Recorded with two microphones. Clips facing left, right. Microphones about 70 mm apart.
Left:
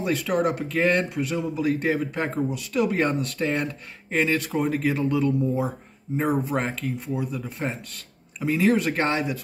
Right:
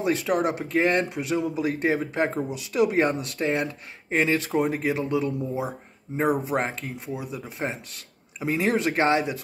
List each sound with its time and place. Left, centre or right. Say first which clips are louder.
0.0 s speech: even; right